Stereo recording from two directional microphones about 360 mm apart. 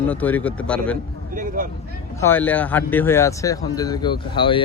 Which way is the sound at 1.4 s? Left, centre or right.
Right.